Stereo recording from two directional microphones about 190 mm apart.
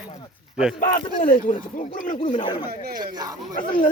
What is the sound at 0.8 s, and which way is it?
Speech, 45° left (ahead or behind).